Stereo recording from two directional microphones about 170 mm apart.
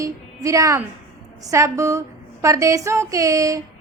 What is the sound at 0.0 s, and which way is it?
A woman's voice, 20° right (ahead or behind).